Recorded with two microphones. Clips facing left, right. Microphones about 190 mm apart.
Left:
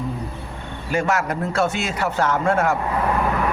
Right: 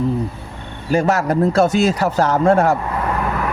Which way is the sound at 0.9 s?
35° right (ahead or behind).